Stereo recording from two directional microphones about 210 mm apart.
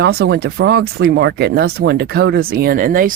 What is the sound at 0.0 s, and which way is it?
Speech, 50° right (ahead or behind).